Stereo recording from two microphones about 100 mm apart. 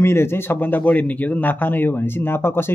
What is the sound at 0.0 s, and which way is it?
Speech, 25° left (ahead or behind).